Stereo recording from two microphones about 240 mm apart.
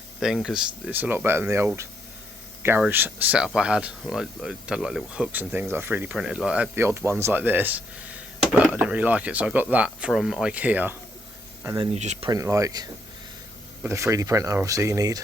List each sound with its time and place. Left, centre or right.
0.2 s speech: centre
11.9 s speech: right
12.3 s speech: centre